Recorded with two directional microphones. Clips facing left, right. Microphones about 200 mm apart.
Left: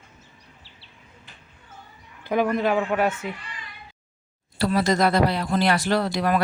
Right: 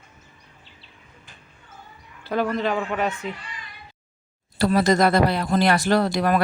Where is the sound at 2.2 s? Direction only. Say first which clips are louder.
Left 1 dB; 15° left (ahead or behind).